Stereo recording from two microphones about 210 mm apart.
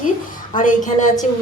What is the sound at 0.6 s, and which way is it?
Speech, 35° left (ahead or behind).